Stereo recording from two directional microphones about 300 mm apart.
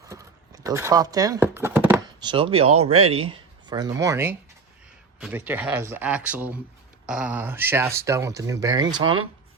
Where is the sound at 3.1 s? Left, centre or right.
Centre.